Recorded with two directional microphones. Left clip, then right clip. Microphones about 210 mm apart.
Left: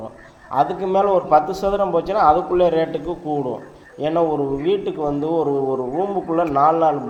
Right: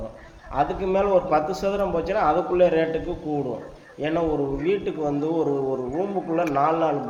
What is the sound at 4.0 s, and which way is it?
A man's voice, 15° left (ahead or behind).